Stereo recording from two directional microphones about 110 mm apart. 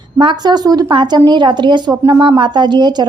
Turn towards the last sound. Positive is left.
turn(degrees=-40)  # may be behind; listen again after turning